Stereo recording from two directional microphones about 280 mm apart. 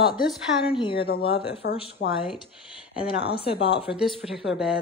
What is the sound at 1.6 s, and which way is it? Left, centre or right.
Speech, left.